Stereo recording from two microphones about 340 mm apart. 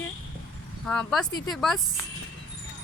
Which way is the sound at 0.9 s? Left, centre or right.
Centre.